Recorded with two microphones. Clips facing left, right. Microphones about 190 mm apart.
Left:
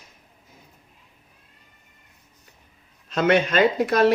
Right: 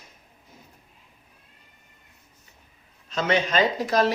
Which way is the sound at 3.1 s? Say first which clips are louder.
Left 4 dB; 60° left (ahead or behind).